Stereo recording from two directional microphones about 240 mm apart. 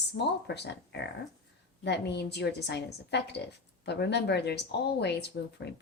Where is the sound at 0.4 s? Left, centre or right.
Left.